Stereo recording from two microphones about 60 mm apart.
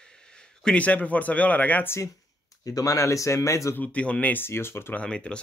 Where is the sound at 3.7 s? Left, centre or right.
Left.